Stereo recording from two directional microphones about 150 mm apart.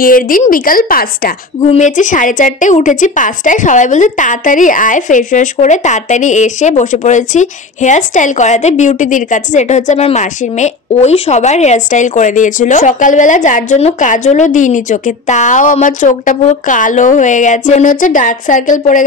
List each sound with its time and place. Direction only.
0.0 s a woman's voice: 70° left (ahead or behind)
1.6 s a woman's voice: 50° left (ahead or behind)